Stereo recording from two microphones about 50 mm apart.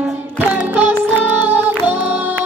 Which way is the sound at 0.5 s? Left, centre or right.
Right.